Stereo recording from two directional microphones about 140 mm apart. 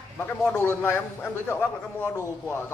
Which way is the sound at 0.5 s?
15° left (ahead or behind).